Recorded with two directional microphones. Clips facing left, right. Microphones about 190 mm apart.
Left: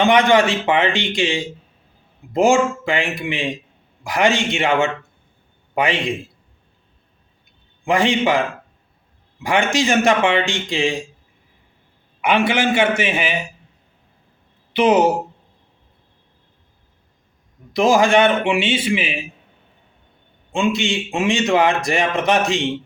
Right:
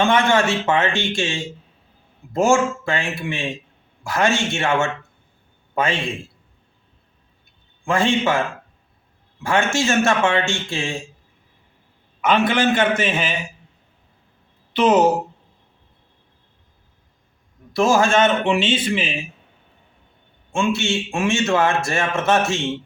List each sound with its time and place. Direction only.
0.0 s a man's voice: 15° left (ahead or behind)
7.9 s a man's voice: 15° left (ahead or behind)
12.2 s a man's voice: 15° left (ahead or behind)
14.8 s a man's voice: 10° left (ahead or behind)
17.7 s a man's voice: 15° left (ahead or behind)
20.5 s a man's voice: 15° left (ahead or behind)